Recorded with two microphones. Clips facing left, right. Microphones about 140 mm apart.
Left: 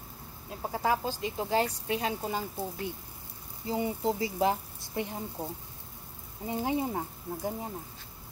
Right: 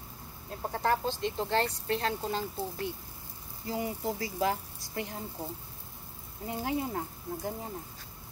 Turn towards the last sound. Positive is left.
turn(degrees=15)  # may be behind; listen again after turning